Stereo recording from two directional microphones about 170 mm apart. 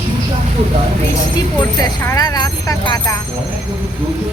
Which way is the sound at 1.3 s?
25° left (ahead or behind).